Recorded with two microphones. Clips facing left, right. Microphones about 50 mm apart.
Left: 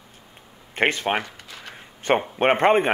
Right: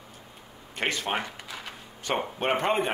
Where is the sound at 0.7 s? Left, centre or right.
Left.